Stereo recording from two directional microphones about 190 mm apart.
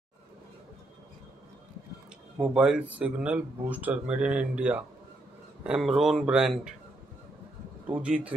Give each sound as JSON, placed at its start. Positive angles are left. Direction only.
{"t": 2.4, "sound": "speech", "side_deg": -5}
{"t": 7.8, "sound": "speech", "side_deg": -5}